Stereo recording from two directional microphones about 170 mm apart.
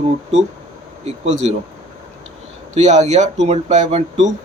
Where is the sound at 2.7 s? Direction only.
45° right (ahead or behind).